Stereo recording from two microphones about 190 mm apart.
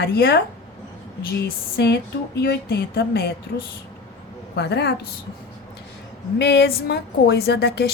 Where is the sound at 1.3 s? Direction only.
60° left (ahead or behind).